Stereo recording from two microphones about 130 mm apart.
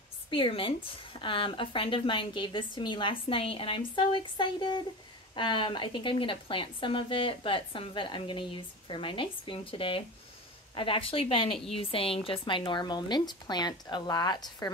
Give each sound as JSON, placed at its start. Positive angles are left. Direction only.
{"t": 0.3, "sound": "a woman's voice", "side_deg": 40}